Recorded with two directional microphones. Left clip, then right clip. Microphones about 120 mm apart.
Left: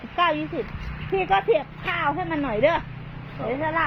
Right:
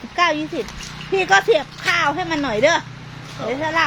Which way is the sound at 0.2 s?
50° right (ahead or behind).